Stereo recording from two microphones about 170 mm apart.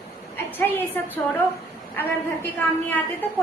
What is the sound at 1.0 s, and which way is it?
Female singing, 10° left (ahead or behind).